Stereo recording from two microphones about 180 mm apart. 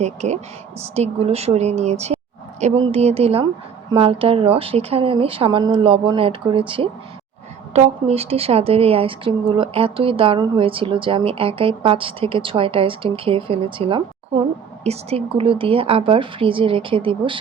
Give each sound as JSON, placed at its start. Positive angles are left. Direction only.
{"t": 0.0, "sound": "a woman's voice", "side_deg": -40}